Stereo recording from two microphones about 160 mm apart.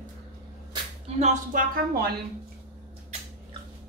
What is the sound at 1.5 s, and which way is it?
Speech, 70° right (ahead or behind).